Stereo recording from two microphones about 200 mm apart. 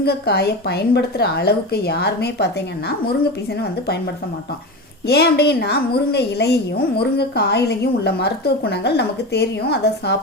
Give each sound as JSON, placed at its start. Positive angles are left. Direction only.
{"t": 0.0, "sound": "a woman's voice", "side_deg": 55}